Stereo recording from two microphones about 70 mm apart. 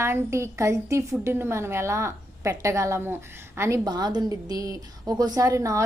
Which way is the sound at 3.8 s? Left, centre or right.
Right.